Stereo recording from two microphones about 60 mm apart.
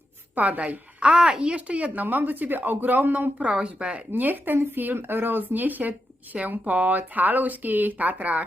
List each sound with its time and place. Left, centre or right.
0.3 s a woman's voice: right
3.3 s speech: centre
4.1 s a woman's voice: right